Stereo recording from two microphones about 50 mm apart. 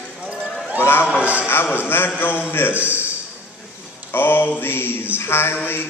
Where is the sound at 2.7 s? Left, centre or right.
Right.